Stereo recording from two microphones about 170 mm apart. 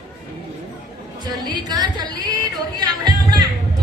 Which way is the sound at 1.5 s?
25° right (ahead or behind).